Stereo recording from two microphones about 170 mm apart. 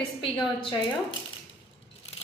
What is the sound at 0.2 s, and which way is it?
Speech, 25° left (ahead or behind).